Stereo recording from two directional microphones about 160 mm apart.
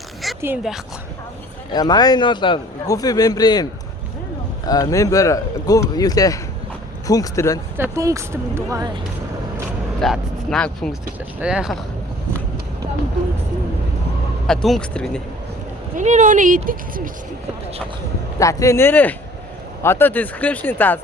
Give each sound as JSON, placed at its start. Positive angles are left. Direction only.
{"t": 0.2, "sound": "dog", "side_deg": 0}
{"t": 1.7, "sound": "a man's voice", "side_deg": 25}
{"t": 7.8, "sound": "speech", "side_deg": -20}
{"t": 10.0, "sound": "speech", "side_deg": 0}
{"t": 14.4, "sound": "speech", "side_deg": 0}
{"t": 16.0, "sound": "speech", "side_deg": -50}
{"t": 18.3, "sound": "speech", "side_deg": 20}